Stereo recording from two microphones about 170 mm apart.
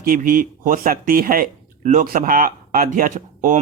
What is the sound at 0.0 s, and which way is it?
Speech, 55° right (ahead or behind).